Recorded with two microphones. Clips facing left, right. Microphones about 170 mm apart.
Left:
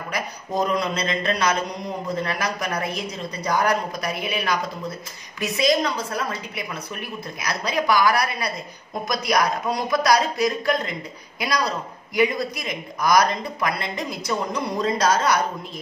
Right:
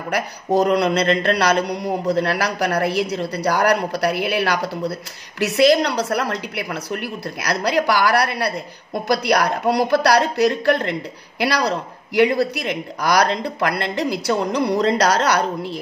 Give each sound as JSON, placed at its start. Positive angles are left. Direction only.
{"t": 0.1, "sound": "a woman's voice", "side_deg": -75}